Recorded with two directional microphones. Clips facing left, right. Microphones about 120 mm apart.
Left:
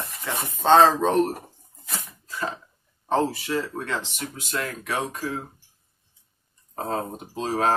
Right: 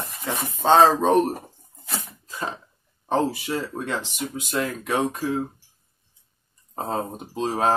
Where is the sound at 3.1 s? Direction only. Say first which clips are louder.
Even; 15° right (ahead or behind).